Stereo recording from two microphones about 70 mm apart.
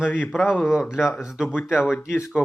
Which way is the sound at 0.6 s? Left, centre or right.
Centre.